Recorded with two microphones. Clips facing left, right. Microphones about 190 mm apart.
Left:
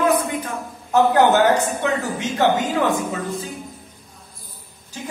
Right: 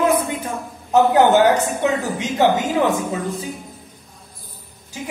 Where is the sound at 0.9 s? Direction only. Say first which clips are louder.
Right 2 dB; 15° right (ahead or behind).